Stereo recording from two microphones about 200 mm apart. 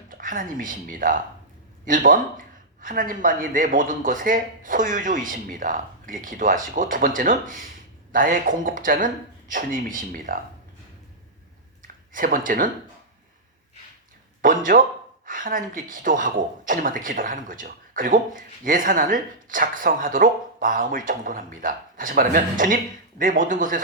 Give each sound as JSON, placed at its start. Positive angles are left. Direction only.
{"t": 0.1, "sound": "speech", "side_deg": -40}
{"t": 11.8, "sound": "a sound", "side_deg": -45}
{"t": 14.4, "sound": "speech", "side_deg": -45}